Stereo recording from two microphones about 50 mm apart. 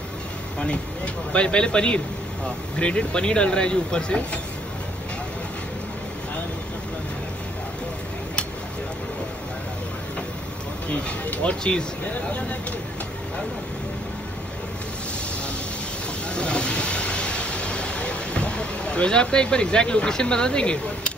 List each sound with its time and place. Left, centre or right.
0.6 s speech: left
10.9 s speech: left
16.3 s speech: centre